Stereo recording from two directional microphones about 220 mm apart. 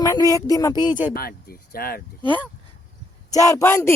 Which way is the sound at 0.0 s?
15° left (ahead or behind).